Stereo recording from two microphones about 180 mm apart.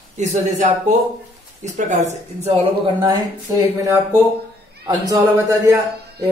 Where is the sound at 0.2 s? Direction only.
40° right (ahead or behind).